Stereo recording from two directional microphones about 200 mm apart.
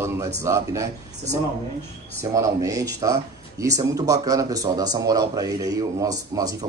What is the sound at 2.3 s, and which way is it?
Speech, 15° right (ahead or behind).